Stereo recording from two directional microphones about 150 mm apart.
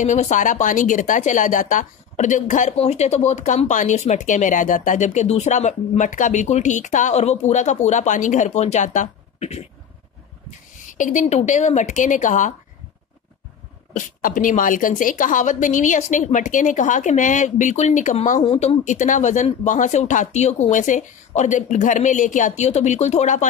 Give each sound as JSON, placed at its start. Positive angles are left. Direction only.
{"t": 0.0, "sound": "speech", "side_deg": 55}
{"t": 10.9, "sound": "speech", "side_deg": 60}
{"t": 13.9, "sound": "speech", "side_deg": 60}
{"t": 18.4, "sound": "speech", "side_deg": 40}